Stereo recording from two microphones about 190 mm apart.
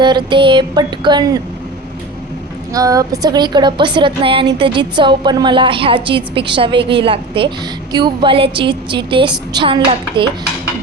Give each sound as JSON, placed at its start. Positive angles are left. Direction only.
{"t": 0.0, "sound": "a woman's voice", "side_deg": -25}
{"t": 2.7, "sound": "a woman's voice", "side_deg": -20}